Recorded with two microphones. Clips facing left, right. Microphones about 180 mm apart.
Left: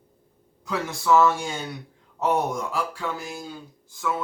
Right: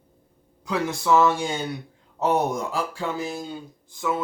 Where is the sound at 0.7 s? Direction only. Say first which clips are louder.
Even; 15° right (ahead or behind).